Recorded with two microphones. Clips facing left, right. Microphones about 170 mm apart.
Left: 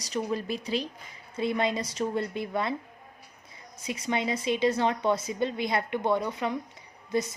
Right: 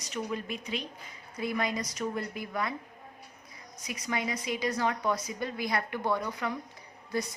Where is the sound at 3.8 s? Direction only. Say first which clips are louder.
Left 4 dB; 25° left (ahead or behind).